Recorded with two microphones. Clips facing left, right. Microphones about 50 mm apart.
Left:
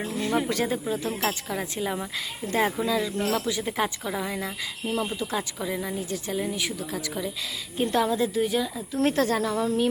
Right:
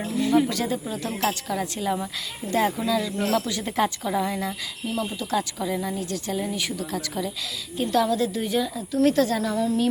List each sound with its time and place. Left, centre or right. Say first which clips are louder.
0.2 s a woman's voice: right 4 dB; left
0.9 s speech: right 1 dB; centre
2.5 s speech: right 2 dB; left
3.2 s speech: right 2 dB; centre
4.9 s a woman's voice: even; left
5.2 s speech: right 3 dB; centre
7.8 s a woman's voice: right 2 dB; left
8.2 s speech: even; centre
9.0 s a woman's voice: right 3 dB; left